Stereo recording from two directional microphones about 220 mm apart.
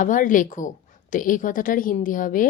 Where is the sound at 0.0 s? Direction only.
35° left (ahead or behind).